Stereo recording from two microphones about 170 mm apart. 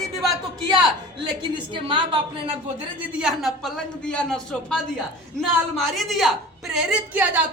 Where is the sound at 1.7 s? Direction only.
30° right (ahead or behind).